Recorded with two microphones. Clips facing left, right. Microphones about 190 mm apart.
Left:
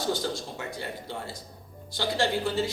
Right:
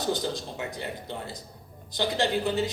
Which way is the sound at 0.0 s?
20° right (ahead or behind).